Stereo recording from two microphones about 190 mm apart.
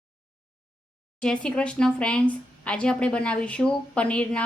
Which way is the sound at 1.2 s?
5° left (ahead or behind).